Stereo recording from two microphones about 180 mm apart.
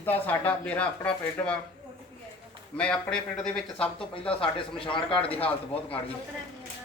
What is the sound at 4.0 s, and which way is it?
Speech, 30° left (ahead or behind).